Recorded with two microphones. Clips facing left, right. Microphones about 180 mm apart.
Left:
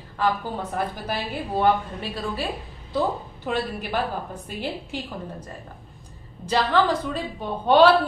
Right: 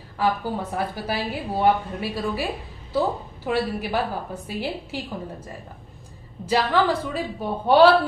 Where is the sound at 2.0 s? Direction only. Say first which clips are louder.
Right 3 dB; 10° right (ahead or behind).